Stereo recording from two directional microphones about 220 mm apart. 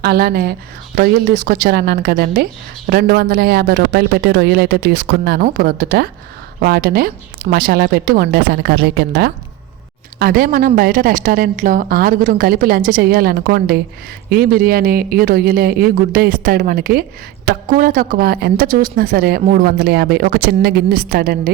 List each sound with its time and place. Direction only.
0.0 s a woman's voice: 45° right (ahead or behind)